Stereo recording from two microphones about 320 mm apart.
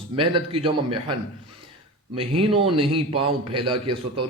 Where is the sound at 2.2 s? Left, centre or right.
Centre.